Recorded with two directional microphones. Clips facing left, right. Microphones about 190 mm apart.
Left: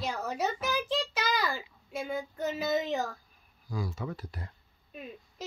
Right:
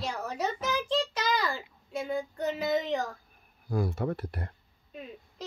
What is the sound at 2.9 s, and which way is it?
Speech, 5° left (ahead or behind).